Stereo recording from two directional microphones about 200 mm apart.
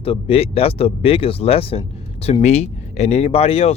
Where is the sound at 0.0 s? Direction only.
30° left (ahead or behind).